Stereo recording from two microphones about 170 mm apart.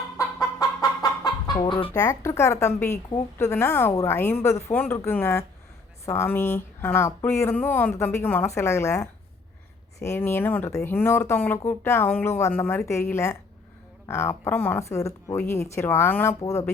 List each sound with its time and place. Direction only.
0.8 s speech: 25° left (ahead or behind)